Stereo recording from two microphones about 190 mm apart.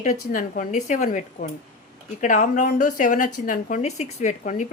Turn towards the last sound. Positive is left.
turn(degrees=40)  # may be behind; listen again after turning